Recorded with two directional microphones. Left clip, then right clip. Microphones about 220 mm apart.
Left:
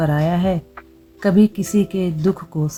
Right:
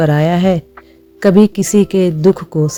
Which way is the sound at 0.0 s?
35° right (ahead or behind).